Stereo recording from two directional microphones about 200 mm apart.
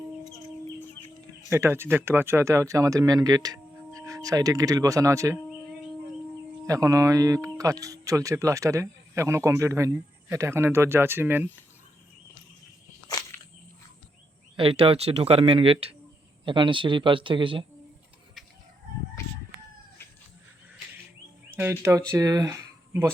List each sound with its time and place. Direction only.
1.5 s speech: 15° right (ahead or behind)
6.7 s speech: 15° right (ahead or behind)
13.1 s walk: 15° left (ahead or behind)
14.5 s speech: 25° right (ahead or behind)
21.5 s speech: 10° right (ahead or behind)